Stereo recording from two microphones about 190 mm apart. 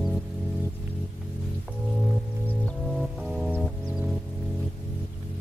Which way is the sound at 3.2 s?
Centre (ahead or behind).